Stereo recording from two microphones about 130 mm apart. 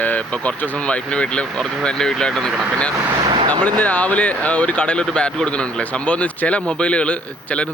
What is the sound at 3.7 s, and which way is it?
Speech, 10° left (ahead or behind).